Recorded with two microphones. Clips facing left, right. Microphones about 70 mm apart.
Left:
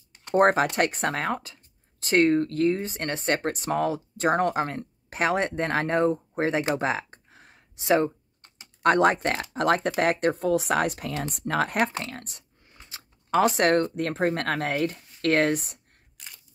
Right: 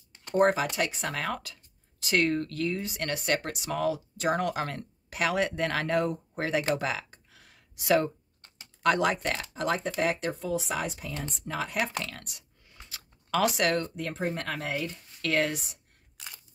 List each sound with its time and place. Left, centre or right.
0.3 s speech: left
6.7 s a sound: left
8.8 s speech: left
12.0 s speech: left